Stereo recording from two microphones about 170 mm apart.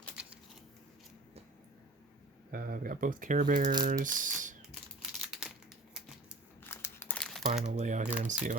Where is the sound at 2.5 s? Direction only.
55° right (ahead or behind).